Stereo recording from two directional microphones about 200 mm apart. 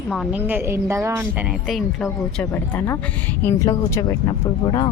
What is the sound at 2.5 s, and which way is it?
Speech, 15° left (ahead or behind).